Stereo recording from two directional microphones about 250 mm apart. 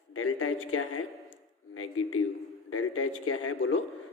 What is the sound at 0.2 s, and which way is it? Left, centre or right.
A man's voice, left.